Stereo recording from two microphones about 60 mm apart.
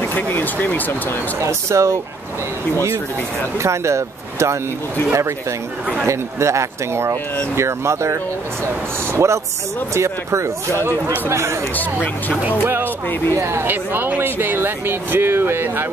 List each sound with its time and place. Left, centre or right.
0.0 s speech: left
1.4 s speech: right
3.5 s speech: right
6.0 s speech: right
11.7 s speech: left
13.4 s speech: right